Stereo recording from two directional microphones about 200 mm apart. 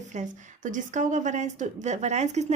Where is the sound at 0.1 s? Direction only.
40° right (ahead or behind).